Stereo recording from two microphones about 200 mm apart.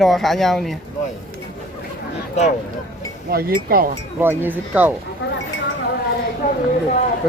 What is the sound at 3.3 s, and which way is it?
Speech, 50° right (ahead or behind).